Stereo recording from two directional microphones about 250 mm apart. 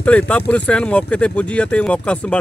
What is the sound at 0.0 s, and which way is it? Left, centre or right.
Speech, centre.